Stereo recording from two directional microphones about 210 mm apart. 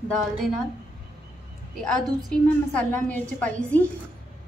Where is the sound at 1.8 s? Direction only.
Centre (ahead or behind).